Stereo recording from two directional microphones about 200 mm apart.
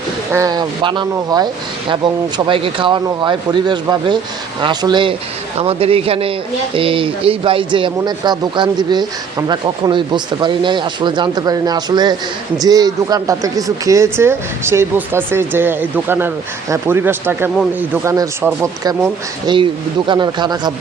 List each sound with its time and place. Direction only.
0.3 s speech: 20° right (ahead or behind)